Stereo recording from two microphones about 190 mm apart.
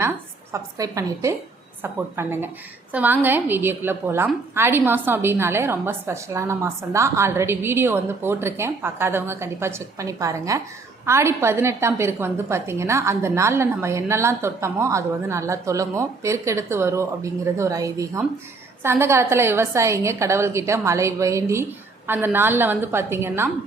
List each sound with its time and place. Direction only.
0.5 s a woman's voice: 15° right (ahead or behind)